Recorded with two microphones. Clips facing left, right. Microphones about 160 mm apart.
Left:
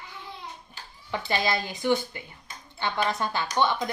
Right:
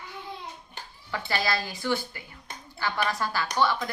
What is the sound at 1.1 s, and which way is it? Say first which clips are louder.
A woman's voice: left 2 dB; 20° left (ahead or behind).